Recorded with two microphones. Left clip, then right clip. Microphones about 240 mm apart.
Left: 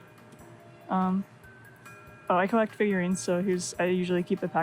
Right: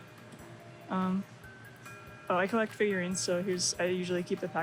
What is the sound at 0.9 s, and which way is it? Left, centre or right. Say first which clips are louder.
Speech: left 6 dB; left.